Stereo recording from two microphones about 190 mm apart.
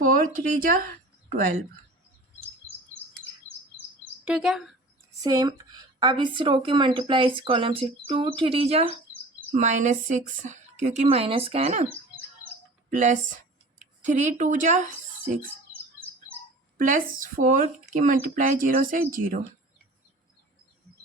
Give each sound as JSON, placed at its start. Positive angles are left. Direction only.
{"t": 0.0, "sound": "speech", "side_deg": -45}
{"t": 4.3, "sound": "speech", "side_deg": -5}
{"t": 5.2, "sound": "a woman's voice", "side_deg": -20}
{"t": 12.9, "sound": "speech", "side_deg": -40}
{"t": 16.7, "sound": "speech", "side_deg": -45}